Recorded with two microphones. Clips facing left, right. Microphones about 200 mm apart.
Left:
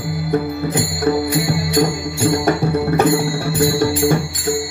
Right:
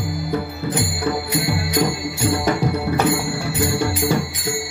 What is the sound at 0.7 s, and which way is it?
Music, 50° left (ahead or behind).